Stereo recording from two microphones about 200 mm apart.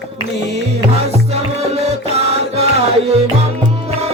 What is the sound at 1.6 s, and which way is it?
Music, 30° right (ahead or behind).